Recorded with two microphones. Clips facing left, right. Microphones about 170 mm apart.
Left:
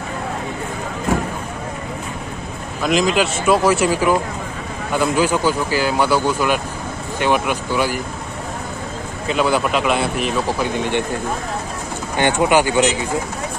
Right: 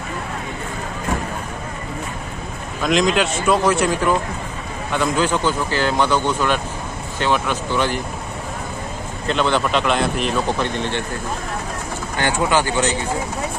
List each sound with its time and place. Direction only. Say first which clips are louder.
2.8 s a man's voice: left 1 dB; 5° left (ahead or behind)
9.3 s a man's voice: left 1 dB; 5° left (ahead or behind)
12.2 s speech: left 4 dB; 15° left (ahead or behind)